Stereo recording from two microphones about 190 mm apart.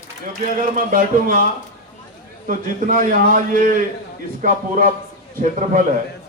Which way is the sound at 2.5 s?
45° right (ahead or behind).